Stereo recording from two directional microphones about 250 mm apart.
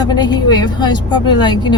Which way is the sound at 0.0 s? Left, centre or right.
Centre.